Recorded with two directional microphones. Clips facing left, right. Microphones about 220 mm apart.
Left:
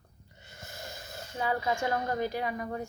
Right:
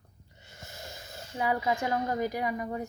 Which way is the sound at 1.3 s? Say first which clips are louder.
Right 1 dB; 15° right (ahead or behind).